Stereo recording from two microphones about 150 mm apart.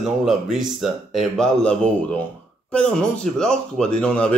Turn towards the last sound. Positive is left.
turn(degrees=5)  # may be behind; listen again after turning